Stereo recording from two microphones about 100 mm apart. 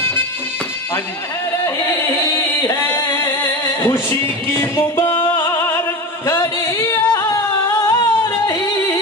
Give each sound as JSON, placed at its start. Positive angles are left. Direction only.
{"t": 1.6, "sound": "music", "side_deg": 20}
{"t": 2.7, "sound": "chant", "side_deg": 25}
{"t": 3.8, "sound": "music", "side_deg": 25}